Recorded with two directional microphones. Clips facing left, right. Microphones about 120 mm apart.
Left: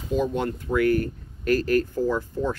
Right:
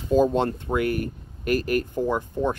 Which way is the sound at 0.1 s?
35° right (ahead or behind).